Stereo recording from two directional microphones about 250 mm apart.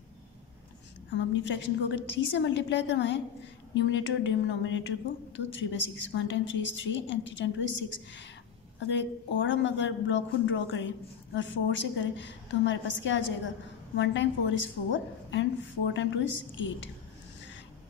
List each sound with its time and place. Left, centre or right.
1.1 s a woman's voice: left
8.8 s a woman's voice: left